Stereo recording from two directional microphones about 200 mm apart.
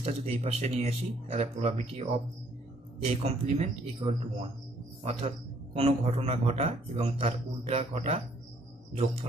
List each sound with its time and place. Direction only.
0.0 s a man's voice: 30° right (ahead or behind)